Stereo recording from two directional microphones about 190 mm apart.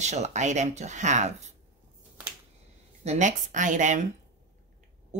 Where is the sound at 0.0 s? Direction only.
35° right (ahead or behind).